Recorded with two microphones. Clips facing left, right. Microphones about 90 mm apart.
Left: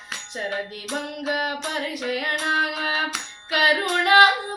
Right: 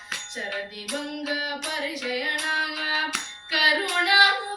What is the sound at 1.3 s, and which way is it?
Music, 50° left (ahead or behind).